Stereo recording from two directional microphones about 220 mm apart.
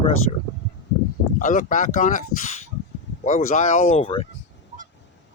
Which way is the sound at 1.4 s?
35° left (ahead or behind).